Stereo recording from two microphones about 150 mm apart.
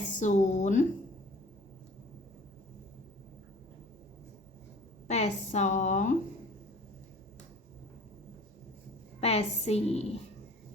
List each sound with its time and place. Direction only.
0.2 s a woman's voice: 55° left (ahead or behind)
5.0 s a woman's voice: 50° left (ahead or behind)
9.2 s a woman's voice: 45° left (ahead or behind)